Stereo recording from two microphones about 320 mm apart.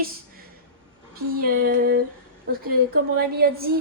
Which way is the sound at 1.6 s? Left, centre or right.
Right.